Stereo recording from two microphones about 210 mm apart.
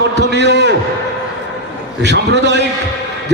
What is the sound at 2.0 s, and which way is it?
Speech, 55° right (ahead or behind).